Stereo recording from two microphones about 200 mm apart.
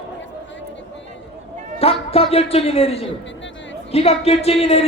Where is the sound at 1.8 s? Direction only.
30° left (ahead or behind).